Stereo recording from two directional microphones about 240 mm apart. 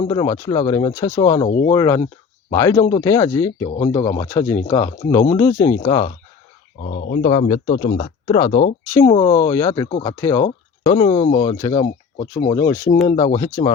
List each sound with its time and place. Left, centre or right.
0.0 s speech: centre
0.7 s speech: left
0.9 s speech: centre
6.8 s speech: left